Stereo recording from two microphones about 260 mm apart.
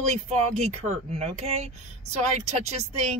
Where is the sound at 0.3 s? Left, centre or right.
Right.